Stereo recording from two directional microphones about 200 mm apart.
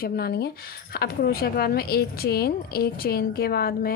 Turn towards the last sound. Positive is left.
turn(degrees=50)  # may be behind; listen again after turning